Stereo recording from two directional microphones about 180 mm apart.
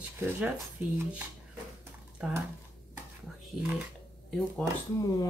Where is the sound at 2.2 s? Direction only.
5° right (ahead or behind).